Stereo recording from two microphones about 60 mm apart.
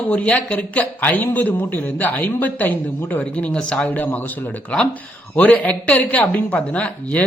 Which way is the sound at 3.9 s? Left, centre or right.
Left.